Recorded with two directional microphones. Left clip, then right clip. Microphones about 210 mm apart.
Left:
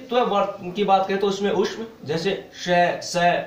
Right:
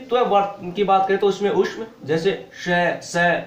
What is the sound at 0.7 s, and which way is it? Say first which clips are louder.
Speech: right 2 dB; 30° right (ahead or behind).